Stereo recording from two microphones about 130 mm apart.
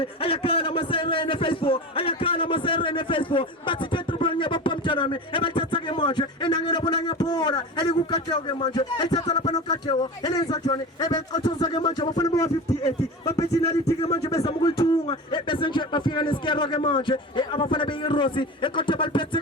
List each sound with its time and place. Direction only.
0.0 s a man's voice: 45° left (ahead or behind); by 12.5 s 25° left (ahead or behind)
13.5 s speech: 25° left (ahead or behind)
14.3 s a man's voice: 40° left (ahead or behind)